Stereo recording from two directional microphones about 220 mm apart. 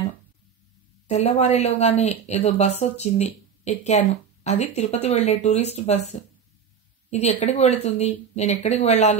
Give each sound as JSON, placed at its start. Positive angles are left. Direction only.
{"t": 1.0, "sound": "speech", "side_deg": 30}
{"t": 7.1, "sound": "speech", "side_deg": 30}